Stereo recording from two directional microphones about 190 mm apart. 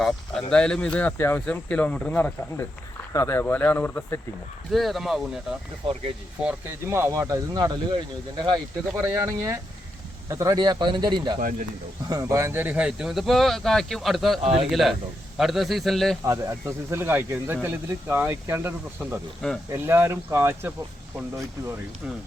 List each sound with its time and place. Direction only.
0.0 s speech: 5° left (ahead or behind)
5.8 s speech: 30° right (ahead or behind)
6.4 s speech: 10° right (ahead or behind)
14.4 s a man's voice: 30° right (ahead or behind)
14.7 s speech: centre (ahead or behind)
16.2 s speech: 15° right (ahead or behind)